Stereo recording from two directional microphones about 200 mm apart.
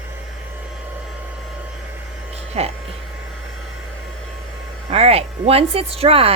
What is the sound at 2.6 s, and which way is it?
Speech, 30° right (ahead or behind).